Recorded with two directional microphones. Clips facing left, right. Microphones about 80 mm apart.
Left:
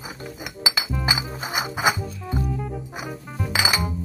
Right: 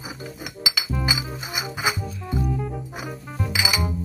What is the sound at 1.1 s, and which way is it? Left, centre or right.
Music, left.